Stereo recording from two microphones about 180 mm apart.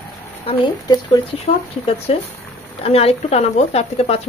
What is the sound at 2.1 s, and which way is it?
Speech, 35° left (ahead or behind).